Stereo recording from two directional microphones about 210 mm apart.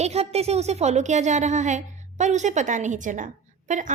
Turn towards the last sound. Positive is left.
turn(degrees=-35)  # may be behind; listen again after turning